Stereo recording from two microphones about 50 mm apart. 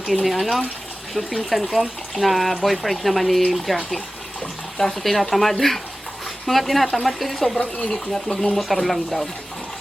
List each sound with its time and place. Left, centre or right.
0.0 s speech: centre
7.6 s speech: left
7.9 s speech: centre